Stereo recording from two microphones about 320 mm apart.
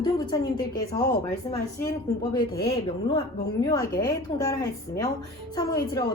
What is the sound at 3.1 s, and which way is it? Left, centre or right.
A woman's voice, centre.